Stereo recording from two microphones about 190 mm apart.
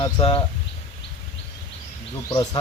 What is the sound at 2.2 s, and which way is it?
Speech, 20° left (ahead or behind).